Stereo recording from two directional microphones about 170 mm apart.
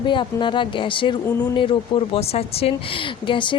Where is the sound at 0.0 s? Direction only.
30° left (ahead or behind).